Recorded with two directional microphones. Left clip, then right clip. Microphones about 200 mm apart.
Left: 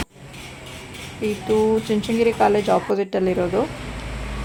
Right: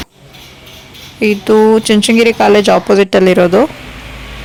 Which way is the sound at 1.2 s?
35° right (ahead or behind).